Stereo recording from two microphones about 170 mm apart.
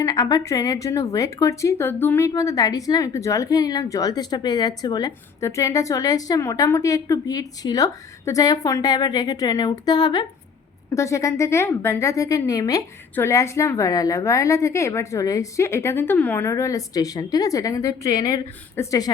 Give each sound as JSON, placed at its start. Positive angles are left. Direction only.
{"t": 0.0, "sound": "a woman's voice", "side_deg": 25}